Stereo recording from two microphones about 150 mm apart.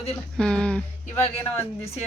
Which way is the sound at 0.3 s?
5° left (ahead or behind).